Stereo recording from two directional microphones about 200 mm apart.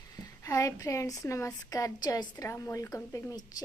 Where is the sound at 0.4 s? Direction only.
15° left (ahead or behind).